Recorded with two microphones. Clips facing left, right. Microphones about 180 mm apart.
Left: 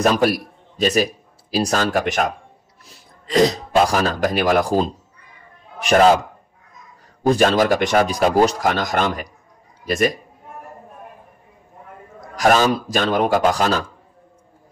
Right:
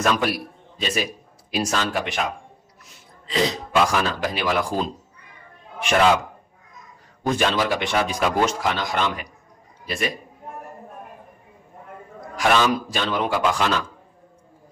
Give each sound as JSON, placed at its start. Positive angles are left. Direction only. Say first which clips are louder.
{"t": 0.0, "sound": "a man's voice", "louder": "left 5 dB", "side_deg": 40}
{"t": 7.2, "sound": "speech", "louder": "left 6 dB", "side_deg": 40}
{"t": 12.4, "sound": "speech", "louder": "left 4 dB", "side_deg": 40}